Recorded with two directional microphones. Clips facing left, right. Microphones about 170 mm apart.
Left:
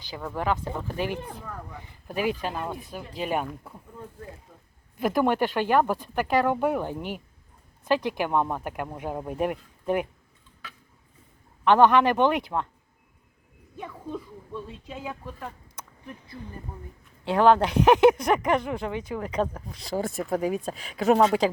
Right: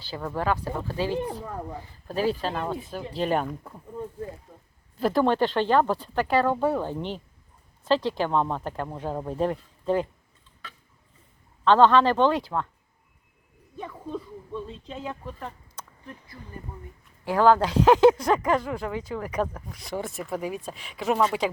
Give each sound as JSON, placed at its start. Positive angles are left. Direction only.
{"t": 0.3, "sound": "speech", "side_deg": 20}
{"t": 1.3, "sound": "speech", "side_deg": -20}
{"t": 2.0, "sound": "speech", "side_deg": 15}
{"t": 4.9, "sound": "speech", "side_deg": 15}
{"t": 11.6, "sound": "speech", "side_deg": 15}
{"t": 14.1, "sound": "speech", "side_deg": 10}
{"t": 15.7, "sound": "a sound", "side_deg": 20}
{"t": 17.2, "sound": "speech", "side_deg": 20}